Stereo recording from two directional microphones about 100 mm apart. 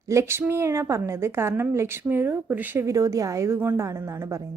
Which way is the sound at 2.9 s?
35° right (ahead or behind).